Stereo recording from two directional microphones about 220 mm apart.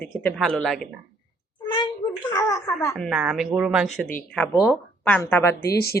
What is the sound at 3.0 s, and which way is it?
A woman's voice, centre (ahead or behind).